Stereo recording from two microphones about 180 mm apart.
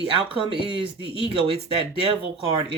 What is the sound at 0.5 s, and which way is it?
Speech, 30° left (ahead or behind).